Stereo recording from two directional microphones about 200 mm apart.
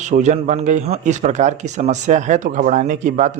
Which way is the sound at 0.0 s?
35° right (ahead or behind).